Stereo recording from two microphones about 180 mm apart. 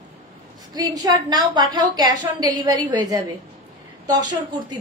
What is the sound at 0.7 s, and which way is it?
A woman's voice, 20° right (ahead or behind).